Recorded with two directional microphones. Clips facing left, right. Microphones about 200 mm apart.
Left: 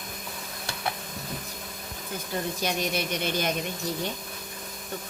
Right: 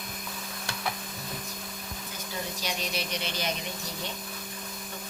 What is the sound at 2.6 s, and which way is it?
Speech, 55° left (ahead or behind).